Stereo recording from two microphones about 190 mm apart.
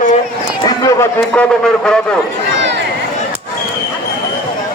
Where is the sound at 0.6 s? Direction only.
20° left (ahead or behind).